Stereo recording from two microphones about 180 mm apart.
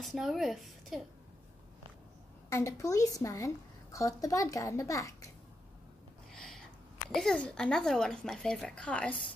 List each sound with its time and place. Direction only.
0.0 s speech: centre (ahead or behind)
2.5 s a woman's voice: 15° left (ahead or behind)
6.3 s a sound: centre (ahead or behind)
7.1 s speech: 5° left (ahead or behind)